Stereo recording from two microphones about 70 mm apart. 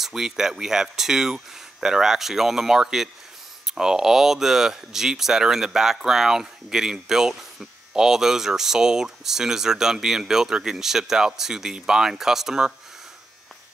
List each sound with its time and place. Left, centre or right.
0.0 s speech: centre